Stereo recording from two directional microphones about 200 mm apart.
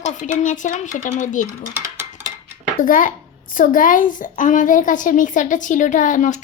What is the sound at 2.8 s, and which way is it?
A child's voice, 40° left (ahead or behind).